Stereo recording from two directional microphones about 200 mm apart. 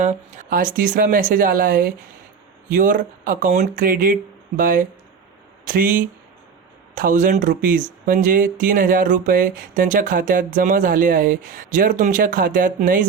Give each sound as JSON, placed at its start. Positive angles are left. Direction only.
{"t": 0.0, "sound": "speech", "side_deg": -35}